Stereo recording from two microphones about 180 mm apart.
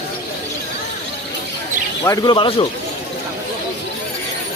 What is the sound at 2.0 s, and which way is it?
Speech, 25° left (ahead or behind).